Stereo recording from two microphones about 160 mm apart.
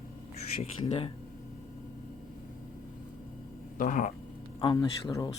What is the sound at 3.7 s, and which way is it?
Speech, 55° left (ahead or behind).